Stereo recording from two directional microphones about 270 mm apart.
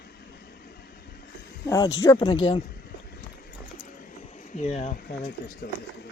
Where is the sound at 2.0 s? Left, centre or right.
Centre.